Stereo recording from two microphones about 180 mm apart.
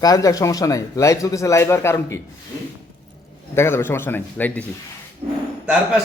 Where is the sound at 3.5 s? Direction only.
15° left (ahead or behind).